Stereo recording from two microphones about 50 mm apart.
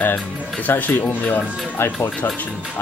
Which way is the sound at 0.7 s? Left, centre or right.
Left.